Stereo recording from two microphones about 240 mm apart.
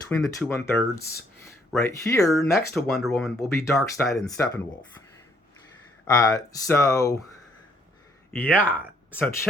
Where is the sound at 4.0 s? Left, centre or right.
Centre.